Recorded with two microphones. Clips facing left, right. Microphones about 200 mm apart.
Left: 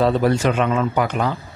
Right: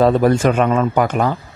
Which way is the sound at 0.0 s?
50° right (ahead or behind).